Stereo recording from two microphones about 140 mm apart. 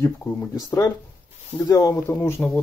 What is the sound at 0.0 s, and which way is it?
Speech, 20° left (ahead or behind).